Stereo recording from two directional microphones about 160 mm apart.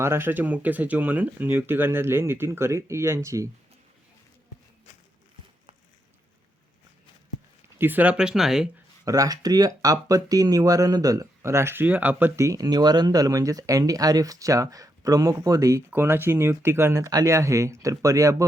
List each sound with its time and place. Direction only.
0.0 s speech: 15° right (ahead or behind)
7.8 s speech: 10° right (ahead or behind)
9.0 s speech: 20° right (ahead or behind)